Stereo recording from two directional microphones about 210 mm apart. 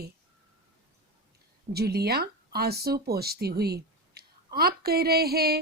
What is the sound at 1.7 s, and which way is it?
Speech, 50° right (ahead or behind).